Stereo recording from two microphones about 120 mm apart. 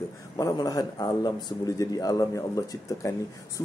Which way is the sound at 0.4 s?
30° left (ahead or behind).